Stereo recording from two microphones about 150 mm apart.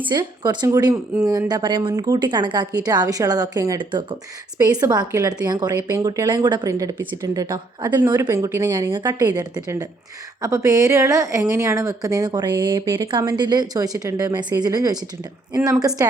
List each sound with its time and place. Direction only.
0.0 s speech: 30° right (ahead or behind)
16.0 s a woman's voice: 15° right (ahead or behind)